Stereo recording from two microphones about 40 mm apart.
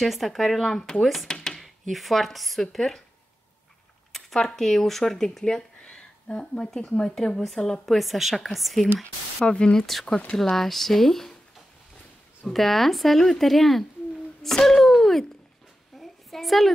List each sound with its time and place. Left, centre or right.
0.0 s speech: centre
1.6 s speech: centre
4.4 s speech: centre
9.5 s speech: left
10.5 s speech: centre
12.4 s speech: centre
16.0 s a sound: centre